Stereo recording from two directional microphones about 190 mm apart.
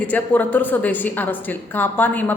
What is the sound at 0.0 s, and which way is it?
A woman's voice, 10° left (ahead or behind).